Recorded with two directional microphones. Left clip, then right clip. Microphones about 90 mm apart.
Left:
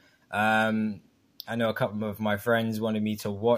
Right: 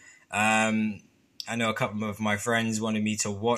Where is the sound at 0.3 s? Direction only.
30° left (ahead or behind).